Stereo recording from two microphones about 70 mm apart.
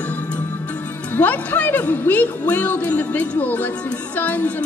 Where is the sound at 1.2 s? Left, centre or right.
Left.